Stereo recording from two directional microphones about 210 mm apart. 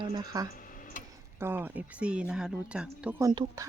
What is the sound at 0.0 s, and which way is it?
Speech, 20° right (ahead or behind).